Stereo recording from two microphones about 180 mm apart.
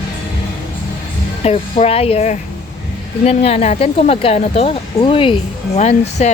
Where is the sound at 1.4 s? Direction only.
35° left (ahead or behind).